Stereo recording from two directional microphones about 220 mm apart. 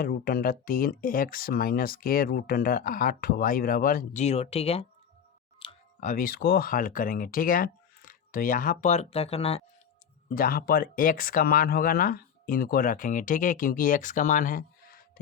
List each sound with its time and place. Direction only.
0.0 s speech: 45° left (ahead or behind); by 9.6 s 25° left (ahead or behind)
10.3 s speech: 40° left (ahead or behind)